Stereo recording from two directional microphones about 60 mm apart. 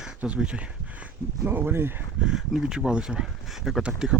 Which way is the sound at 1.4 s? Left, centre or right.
Right.